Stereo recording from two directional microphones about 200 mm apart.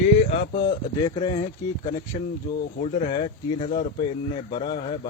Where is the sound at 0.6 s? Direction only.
20° left (ahead or behind).